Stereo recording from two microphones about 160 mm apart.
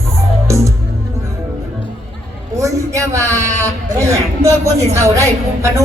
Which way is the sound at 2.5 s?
20° right (ahead or behind).